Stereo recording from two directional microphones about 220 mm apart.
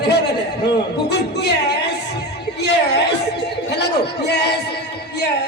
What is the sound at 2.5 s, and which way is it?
Chatter, 50° left (ahead or behind).